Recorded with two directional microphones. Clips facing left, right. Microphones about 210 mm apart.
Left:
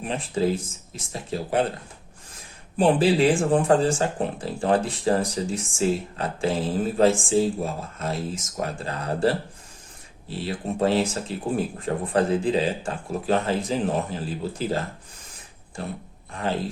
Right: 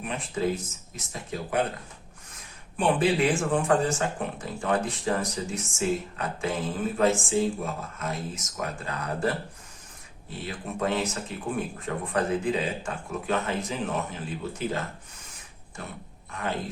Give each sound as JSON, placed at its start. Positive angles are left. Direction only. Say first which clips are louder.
{"t": 0.0, "sound": "speech", "louder": "left 4 dB", "side_deg": 30}
{"t": 2.7, "sound": "speech", "louder": "left 4 dB", "side_deg": 30}
{"t": 15.8, "sound": "speech", "louder": "left 7 dB", "side_deg": 35}